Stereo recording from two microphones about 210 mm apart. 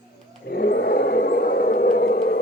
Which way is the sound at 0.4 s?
50° left (ahead or behind).